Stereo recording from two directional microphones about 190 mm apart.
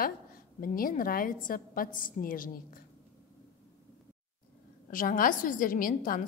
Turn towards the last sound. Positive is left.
turn(degrees=45)  # may be behind; listen again after turning